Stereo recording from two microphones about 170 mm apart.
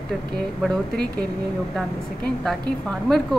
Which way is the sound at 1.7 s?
Centre (ahead or behind).